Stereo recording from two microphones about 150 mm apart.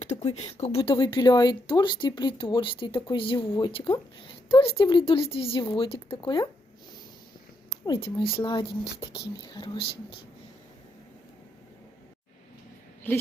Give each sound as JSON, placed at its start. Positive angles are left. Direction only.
{"t": 0.0, "sound": "speech", "side_deg": 50}
{"t": 8.0, "sound": "speech", "side_deg": 35}
{"t": 13.1, "sound": "speech", "side_deg": 10}